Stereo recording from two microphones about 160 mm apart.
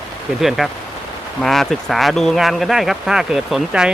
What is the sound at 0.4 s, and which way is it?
Speech, centre (ahead or behind).